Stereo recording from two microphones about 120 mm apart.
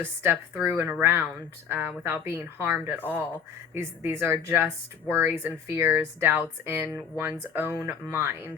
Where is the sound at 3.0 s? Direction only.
15° left (ahead or behind).